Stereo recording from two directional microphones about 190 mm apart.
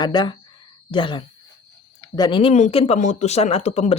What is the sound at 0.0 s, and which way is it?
Speech, 20° left (ahead or behind).